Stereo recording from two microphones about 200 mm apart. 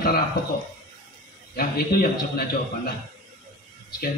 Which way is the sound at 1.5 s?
50° left (ahead or behind).